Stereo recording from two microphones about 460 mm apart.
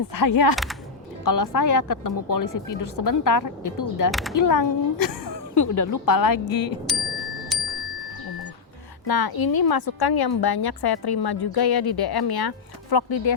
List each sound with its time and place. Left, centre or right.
0.1 s a woman's voice: left
0.5 s a sound: centre
1.2 s a woman's voice: left
4.1 s speech: centre
4.4 s a woman's voice: left
6.9 s bicycle bell: centre
7.5 s music: centre
9.0 s a woman's voice: left